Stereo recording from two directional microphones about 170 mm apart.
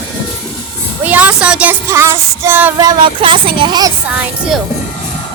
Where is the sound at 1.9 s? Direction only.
15° right (ahead or behind).